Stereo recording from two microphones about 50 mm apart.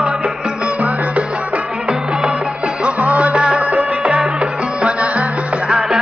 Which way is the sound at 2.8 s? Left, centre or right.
Right.